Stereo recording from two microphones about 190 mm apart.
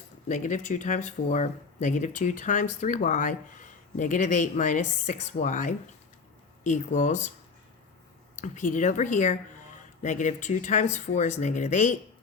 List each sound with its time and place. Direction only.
0.3 s speech: 40° left (ahead or behind)
8.4 s speech: 40° left (ahead or behind)